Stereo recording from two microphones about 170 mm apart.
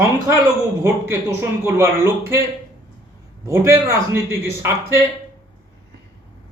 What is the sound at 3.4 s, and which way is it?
A man's voice, 15° right (ahead or behind).